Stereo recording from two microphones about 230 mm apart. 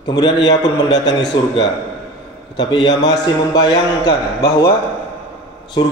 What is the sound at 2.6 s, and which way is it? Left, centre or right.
A man's voice, centre.